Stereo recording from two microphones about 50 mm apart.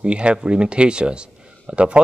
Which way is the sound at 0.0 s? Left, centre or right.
Right.